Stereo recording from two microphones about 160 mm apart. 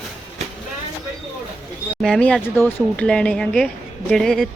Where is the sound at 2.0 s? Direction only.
5° left (ahead or behind).